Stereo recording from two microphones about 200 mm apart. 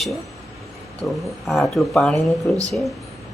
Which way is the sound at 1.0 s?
Centre (ahead or behind).